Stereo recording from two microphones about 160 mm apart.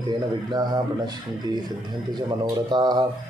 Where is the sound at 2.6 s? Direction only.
25° right (ahead or behind).